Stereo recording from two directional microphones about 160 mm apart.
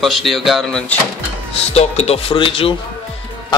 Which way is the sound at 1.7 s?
40° left (ahead or behind).